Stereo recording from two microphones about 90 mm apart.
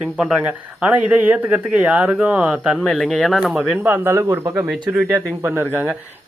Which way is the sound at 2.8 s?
5° left (ahead or behind).